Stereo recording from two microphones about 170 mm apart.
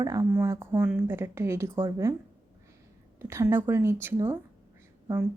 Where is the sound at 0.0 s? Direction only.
20° right (ahead or behind).